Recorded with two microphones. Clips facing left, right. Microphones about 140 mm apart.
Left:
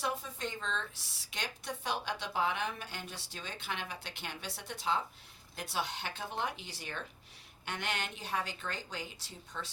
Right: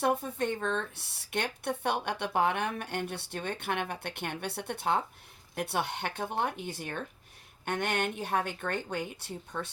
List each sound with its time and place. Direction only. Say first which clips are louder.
0.0 s speech: right 8 dB; 55° right (ahead or behind)